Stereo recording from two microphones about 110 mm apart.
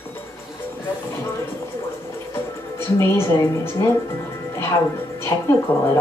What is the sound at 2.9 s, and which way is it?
Speech, 25° left (ahead or behind).